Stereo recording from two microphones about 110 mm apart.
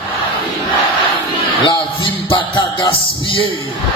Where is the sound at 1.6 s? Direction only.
50° left (ahead or behind).